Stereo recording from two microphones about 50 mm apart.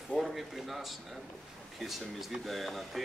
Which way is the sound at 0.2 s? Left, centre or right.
Centre.